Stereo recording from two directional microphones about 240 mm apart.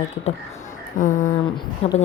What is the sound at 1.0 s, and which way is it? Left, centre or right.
Speech, left.